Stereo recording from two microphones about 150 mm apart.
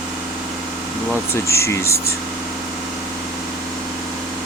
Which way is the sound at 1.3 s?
20° left (ahead or behind).